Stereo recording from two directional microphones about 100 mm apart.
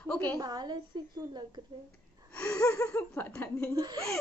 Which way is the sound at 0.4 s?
45° right (ahead or behind).